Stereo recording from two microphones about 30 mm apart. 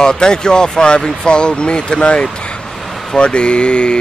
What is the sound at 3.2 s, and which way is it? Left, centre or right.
Speech, left.